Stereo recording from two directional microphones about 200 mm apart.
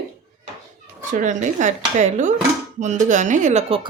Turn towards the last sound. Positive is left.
turn(degrees=-30)  # may be behind; listen again after turning